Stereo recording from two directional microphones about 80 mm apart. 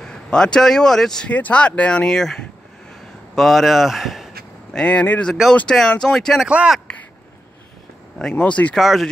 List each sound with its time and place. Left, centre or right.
0.0 s speech: centre
4.7 s speech: centre
5.3 s speech: centre
6.4 s speech: centre
8.2 s speech: centre
8.7 s speech: centre